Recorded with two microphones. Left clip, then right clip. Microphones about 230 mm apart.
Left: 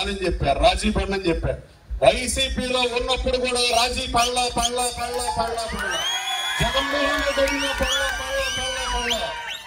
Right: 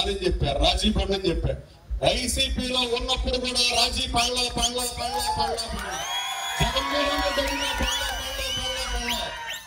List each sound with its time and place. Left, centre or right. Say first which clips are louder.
0.2 s speech: left 5 dB; centre